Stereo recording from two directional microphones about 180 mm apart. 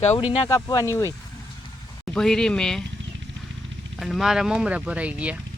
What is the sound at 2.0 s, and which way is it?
Speech, 5° left (ahead or behind).